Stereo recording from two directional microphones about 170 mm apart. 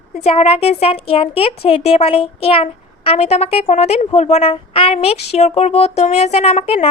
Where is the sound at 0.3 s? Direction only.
35° left (ahead or behind).